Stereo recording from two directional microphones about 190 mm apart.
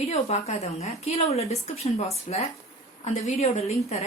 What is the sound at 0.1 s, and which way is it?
A woman's voice, 35° left (ahead or behind).